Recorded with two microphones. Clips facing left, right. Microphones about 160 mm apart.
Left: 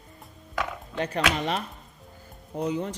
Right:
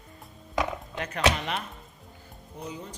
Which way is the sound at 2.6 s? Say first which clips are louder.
Left 11 dB; 70° left (ahead or behind).